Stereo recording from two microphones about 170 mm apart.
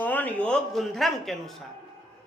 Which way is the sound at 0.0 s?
10° left (ahead or behind).